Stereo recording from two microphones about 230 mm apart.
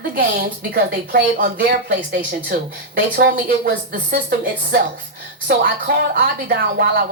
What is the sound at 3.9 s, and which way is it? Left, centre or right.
Speech, right.